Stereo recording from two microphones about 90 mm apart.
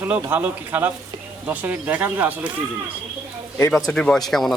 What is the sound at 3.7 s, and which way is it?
Speech, centre (ahead or behind).